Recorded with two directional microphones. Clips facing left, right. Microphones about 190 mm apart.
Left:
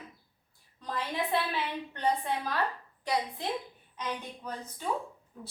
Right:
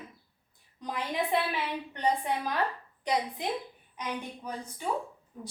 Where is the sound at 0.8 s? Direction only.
15° right (ahead or behind).